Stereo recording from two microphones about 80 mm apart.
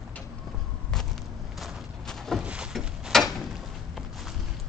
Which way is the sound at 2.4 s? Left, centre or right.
Centre.